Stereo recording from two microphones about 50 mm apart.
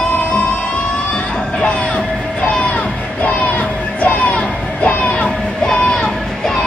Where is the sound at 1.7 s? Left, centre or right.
Left.